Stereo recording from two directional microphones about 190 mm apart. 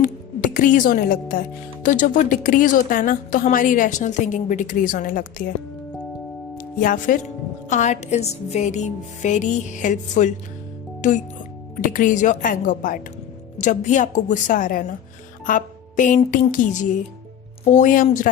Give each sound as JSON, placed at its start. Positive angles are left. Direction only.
{"t": 0.0, "sound": "speech", "side_deg": 45}
{"t": 6.6, "sound": "speech", "side_deg": 45}
{"t": 7.7, "sound": "music", "side_deg": 40}
{"t": 11.9, "sound": "speech", "side_deg": 45}